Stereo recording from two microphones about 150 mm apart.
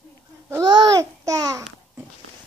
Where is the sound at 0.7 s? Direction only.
20° right (ahead or behind).